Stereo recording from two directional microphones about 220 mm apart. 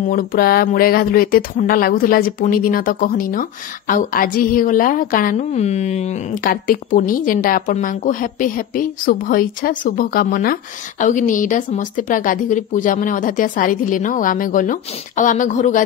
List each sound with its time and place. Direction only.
0.0 s speech: 40° left (ahead or behind)